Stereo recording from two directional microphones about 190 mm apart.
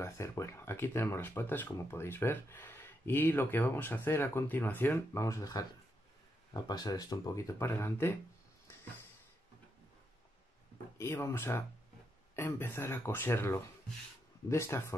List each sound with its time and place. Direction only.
0.0 s speech: 15° left (ahead or behind)
11.0 s speech: 15° left (ahead or behind)